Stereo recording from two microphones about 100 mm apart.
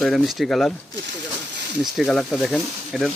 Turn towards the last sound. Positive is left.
turn(degrees=0)  # may be behind; listen again after turning